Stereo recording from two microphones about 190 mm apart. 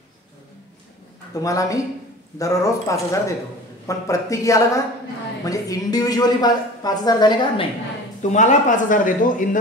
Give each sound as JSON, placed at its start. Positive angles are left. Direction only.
{"t": 1.3, "sound": "a woman's voice", "side_deg": 15}
{"t": 8.2, "sound": "speech", "side_deg": 40}